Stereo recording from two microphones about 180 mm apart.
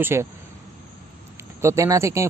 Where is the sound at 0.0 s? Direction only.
15° right (ahead or behind).